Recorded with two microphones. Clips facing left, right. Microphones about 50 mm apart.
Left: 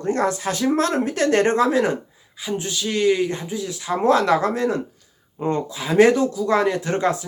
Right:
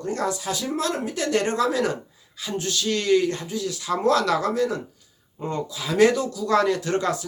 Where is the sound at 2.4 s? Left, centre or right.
Centre.